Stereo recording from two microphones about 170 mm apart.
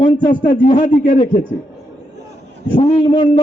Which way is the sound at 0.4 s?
50° left (ahead or behind).